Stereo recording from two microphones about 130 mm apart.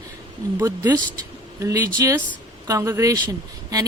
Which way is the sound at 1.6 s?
25° right (ahead or behind).